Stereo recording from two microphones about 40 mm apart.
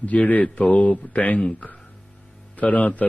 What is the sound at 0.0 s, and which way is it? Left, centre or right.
A man's voice, left.